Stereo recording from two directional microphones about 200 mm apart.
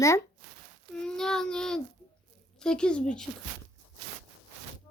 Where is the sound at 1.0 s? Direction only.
5° left (ahead or behind).